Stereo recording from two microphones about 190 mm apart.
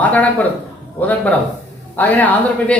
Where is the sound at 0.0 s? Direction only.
10° left (ahead or behind).